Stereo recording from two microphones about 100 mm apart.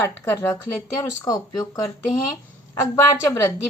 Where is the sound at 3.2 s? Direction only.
25° left (ahead or behind).